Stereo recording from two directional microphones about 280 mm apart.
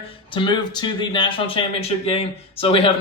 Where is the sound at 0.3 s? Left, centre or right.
Centre.